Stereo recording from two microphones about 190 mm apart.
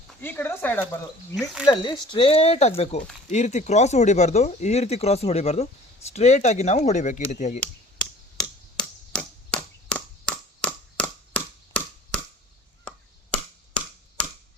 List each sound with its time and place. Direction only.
0.2 s speech: 10° left (ahead or behind)
1.6 s speech: 25° left (ahead or behind)
7.9 s chop: 5° left (ahead or behind)
13.3 s a sound: 5° left (ahead or behind)